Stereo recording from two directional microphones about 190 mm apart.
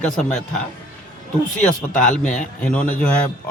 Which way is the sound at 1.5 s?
5° left (ahead or behind).